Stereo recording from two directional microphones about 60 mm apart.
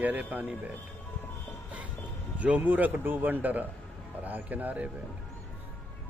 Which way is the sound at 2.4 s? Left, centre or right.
Right.